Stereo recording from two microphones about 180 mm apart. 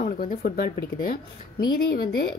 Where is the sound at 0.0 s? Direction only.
50° left (ahead or behind).